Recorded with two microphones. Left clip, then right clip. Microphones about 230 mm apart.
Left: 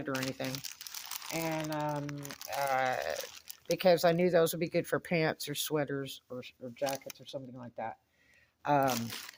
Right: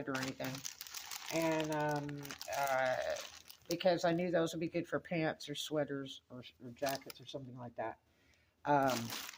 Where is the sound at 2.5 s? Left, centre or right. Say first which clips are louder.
Left 3 dB; left.